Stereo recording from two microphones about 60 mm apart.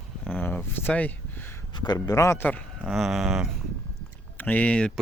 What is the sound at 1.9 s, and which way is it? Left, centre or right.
Speech, left.